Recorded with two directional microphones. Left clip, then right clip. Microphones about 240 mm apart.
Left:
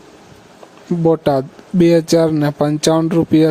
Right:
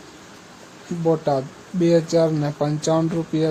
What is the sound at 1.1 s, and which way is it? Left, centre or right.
Speech, left.